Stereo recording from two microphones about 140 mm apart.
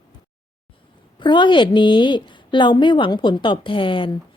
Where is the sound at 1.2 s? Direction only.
35° left (ahead or behind).